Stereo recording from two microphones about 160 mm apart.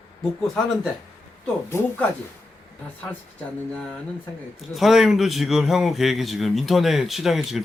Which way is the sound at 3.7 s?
5° left (ahead or behind).